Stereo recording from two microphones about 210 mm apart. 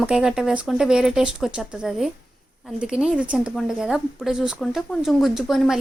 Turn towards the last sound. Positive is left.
turn(degrees=0)  # may be behind; listen again after turning